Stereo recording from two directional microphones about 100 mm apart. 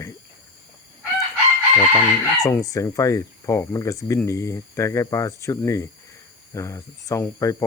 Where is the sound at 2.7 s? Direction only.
35° left (ahead or behind).